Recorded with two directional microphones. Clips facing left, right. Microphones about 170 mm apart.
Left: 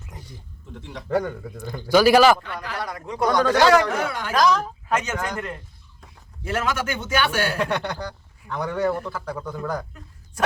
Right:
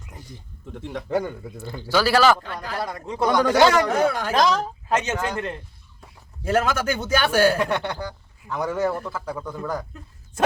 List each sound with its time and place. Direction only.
0.7 s speech: 55° right (ahead or behind)
1.6 s a man's voice: 15° left (ahead or behind)
2.4 s speech: 35° right (ahead or behind); by 3.6 s 15° right (ahead or behind)
4.0 s speech: 40° right (ahead or behind)
4.4 s speech: 25° right (ahead or behind)
6.5 s speech: 40° right (ahead or behind)
7.6 s a man's voice: 10° right (ahead or behind)